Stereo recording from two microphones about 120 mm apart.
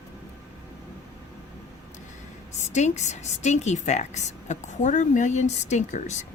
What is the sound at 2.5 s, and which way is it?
A woman's voice, 75° left (ahead or behind).